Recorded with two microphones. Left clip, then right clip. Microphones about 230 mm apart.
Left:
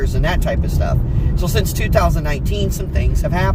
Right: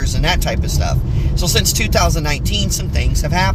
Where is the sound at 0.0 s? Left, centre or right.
Centre.